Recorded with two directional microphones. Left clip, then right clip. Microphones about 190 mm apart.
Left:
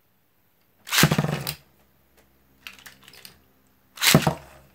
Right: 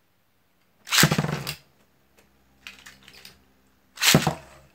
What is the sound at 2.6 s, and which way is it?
Typing, 40° left (ahead or behind).